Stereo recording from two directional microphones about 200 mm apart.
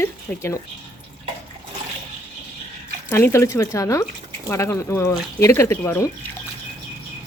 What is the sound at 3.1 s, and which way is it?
Speech, 15° left (ahead or behind).